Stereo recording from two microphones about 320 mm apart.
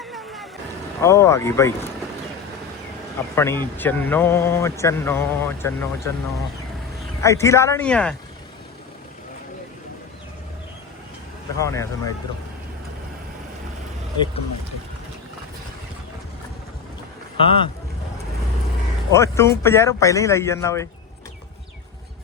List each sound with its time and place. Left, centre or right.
0.0 s boat: centre
1.0 s speech: centre
3.3 s speech: centre
7.2 s speech: centre
11.5 s speech: centre
17.4 s speech: centre
19.1 s speech: centre